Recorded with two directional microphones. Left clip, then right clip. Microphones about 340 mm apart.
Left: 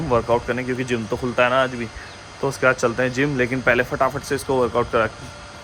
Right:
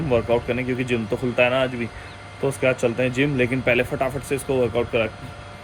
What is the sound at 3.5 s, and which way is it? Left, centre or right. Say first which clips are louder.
Speech: left 2 dB; centre.